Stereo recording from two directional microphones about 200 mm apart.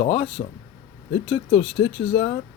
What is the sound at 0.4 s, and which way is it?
Speech, 25° left (ahead or behind).